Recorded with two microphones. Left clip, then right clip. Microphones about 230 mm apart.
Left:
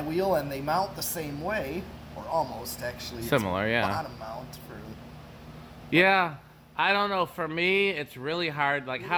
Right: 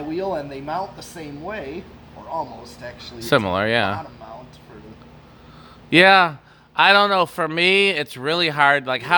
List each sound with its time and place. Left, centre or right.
0.1 s speech: left
3.2 s speech: right
5.9 s speech: right